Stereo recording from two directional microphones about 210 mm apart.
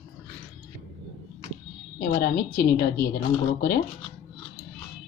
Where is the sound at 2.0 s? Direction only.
45° left (ahead or behind).